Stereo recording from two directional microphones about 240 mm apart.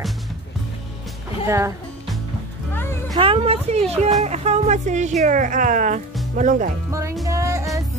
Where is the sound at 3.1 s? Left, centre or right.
Right.